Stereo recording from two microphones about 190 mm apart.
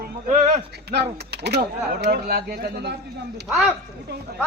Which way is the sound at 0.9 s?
60° right (ahead or behind).